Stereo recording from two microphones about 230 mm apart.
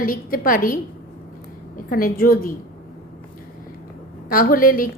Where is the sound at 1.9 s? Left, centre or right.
Left.